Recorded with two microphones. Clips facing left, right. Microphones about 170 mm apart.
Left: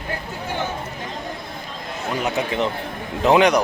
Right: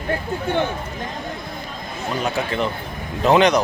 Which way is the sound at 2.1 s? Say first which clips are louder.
Even; 20° left (ahead or behind).